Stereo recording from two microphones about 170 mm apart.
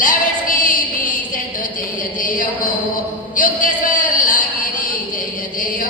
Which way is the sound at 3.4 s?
50° left (ahead or behind).